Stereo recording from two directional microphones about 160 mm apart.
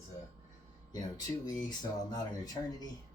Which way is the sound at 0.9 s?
25° left (ahead or behind).